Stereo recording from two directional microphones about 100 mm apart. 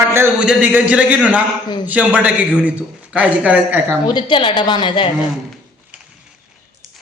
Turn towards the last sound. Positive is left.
turn(degrees=55)  # may be behind; listen again after turning